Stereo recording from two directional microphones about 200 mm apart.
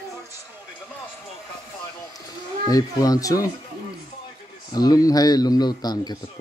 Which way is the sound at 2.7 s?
20° left (ahead or behind).